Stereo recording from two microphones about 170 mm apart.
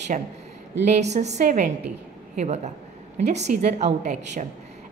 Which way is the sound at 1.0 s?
40° right (ahead or behind).